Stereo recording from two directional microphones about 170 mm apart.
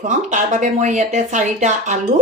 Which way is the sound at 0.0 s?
45° right (ahead or behind).